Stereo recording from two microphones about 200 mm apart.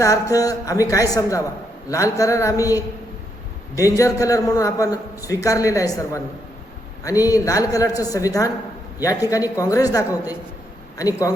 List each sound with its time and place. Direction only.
0.0 s a man's voice: 15° left (ahead or behind)